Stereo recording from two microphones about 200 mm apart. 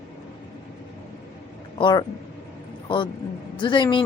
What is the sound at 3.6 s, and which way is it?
Speech, 25° left (ahead or behind).